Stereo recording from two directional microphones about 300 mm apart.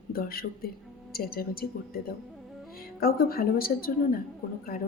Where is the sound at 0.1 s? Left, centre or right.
Left.